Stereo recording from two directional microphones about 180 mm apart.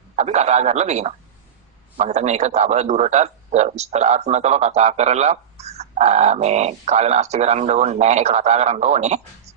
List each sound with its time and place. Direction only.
0.2 s a man's voice: 40° right (ahead or behind)